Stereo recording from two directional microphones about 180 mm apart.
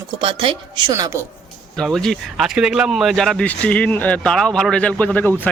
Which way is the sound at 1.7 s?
Centre (ahead or behind).